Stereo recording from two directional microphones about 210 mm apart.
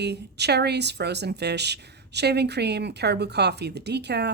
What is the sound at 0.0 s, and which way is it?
Speech, 55° right (ahead or behind).